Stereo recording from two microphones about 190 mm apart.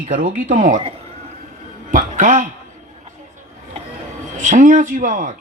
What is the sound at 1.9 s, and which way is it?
Speech, 45° right (ahead or behind).